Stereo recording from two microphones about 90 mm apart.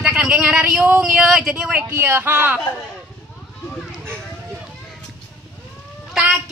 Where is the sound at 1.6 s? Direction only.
15° right (ahead or behind).